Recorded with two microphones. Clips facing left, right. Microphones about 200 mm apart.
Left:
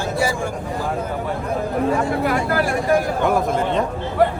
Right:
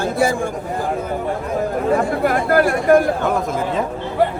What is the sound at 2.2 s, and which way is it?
Speech, 50° right (ahead or behind).